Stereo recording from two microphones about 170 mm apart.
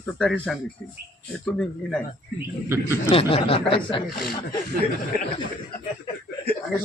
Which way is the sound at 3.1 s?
35° left (ahead or behind).